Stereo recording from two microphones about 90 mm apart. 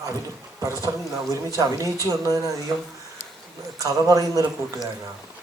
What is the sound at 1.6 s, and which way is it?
Speech, 40° right (ahead or behind).